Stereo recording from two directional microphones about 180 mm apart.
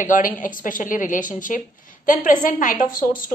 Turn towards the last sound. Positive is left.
turn(degrees=50)  # may be behind; listen again after turning